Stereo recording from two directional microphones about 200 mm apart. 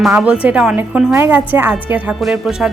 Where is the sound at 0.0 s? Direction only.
5° right (ahead or behind).